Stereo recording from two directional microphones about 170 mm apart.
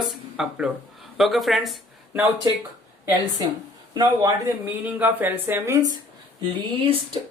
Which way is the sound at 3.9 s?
25° right (ahead or behind).